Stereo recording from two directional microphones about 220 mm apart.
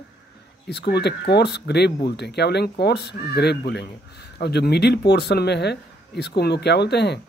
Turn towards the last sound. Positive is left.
turn(degrees=50)  # may be behind; listen again after turning